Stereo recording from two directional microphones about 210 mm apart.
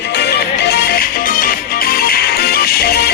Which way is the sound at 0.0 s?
50° left (ahead or behind).